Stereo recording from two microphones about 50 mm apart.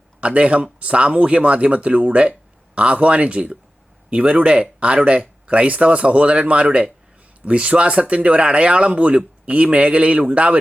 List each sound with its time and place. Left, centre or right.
0.2 s speech: right